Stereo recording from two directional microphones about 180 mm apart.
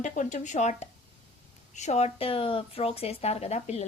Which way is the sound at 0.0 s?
45° left (ahead or behind).